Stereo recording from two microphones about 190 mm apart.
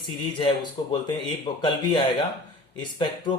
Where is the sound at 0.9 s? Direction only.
25° left (ahead or behind).